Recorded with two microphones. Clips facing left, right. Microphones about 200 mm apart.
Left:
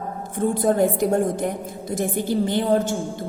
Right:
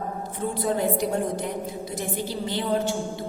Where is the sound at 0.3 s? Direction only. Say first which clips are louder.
Left 7 dB; 50° left (ahead or behind).